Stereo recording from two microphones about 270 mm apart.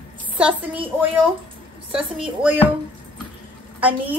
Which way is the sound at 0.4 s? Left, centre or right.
Centre.